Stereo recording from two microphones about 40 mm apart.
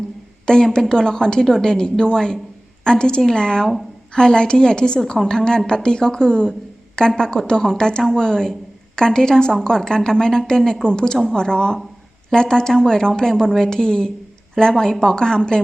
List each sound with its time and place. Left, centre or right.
0.4 s a woman's voice: centre
5.1 s a woman's voice: centre
5.5 s a woman's voice: centre